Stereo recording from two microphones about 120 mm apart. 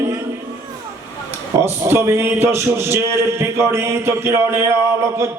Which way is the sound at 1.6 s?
20° right (ahead or behind).